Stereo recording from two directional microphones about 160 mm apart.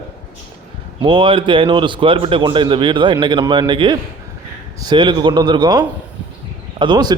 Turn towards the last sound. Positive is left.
turn(degrees=-25)  # may be behind; listen again after turning